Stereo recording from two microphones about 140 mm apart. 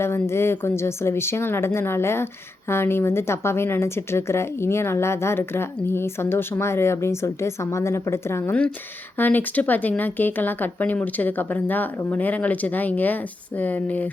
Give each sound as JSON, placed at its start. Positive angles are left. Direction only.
{"t": 0.0, "sound": "speech", "side_deg": 20}